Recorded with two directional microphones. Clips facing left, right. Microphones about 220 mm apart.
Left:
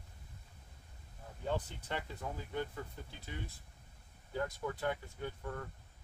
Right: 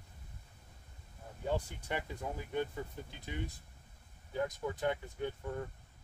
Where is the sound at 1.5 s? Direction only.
10° right (ahead or behind).